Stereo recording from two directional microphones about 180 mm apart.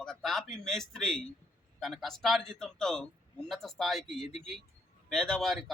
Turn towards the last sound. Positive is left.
turn(degrees=0)  # may be behind; listen again after turning